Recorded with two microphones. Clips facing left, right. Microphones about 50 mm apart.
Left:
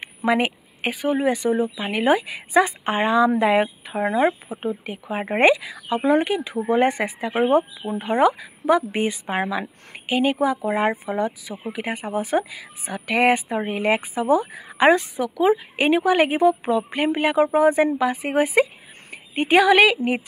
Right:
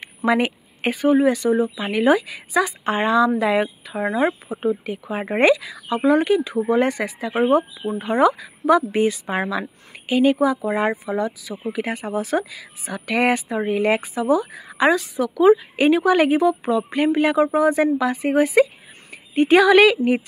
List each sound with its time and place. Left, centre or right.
0.0 s a sound: centre
0.4 s a woman's voice: centre
1.2 s a woman's voice: left
11.6 s a woman's voice: centre
14.2 s a woman's voice: left
15.2 s a woman's voice: centre